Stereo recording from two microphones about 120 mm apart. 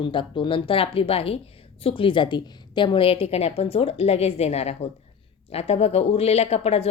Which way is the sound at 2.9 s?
50° left (ahead or behind).